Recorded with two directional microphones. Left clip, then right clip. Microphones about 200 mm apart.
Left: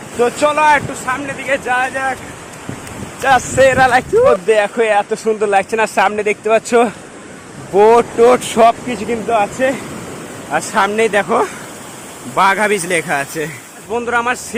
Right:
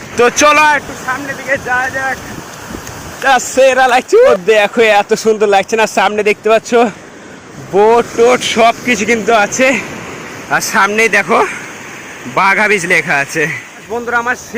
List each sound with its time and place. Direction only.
0.2 s speech: 20° right (ahead or behind)
1.5 s speech: 15° left (ahead or behind)
3.2 s speech: 10° right (ahead or behind)
8.9 s speech: 20° right (ahead or behind)
10.5 s speech: 5° right (ahead or behind)
13.9 s speech: 5° left (ahead or behind)